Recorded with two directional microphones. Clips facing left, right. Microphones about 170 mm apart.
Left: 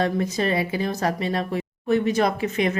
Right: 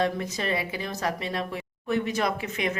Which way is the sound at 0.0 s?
35° left (ahead or behind).